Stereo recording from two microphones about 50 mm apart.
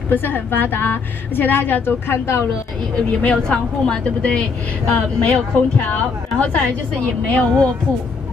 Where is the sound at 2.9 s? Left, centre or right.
Left.